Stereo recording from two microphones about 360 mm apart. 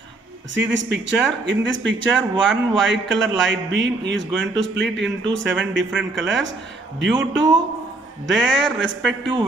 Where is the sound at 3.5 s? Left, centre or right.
Right.